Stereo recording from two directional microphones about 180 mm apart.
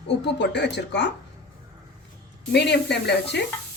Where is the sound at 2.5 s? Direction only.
70° left (ahead or behind).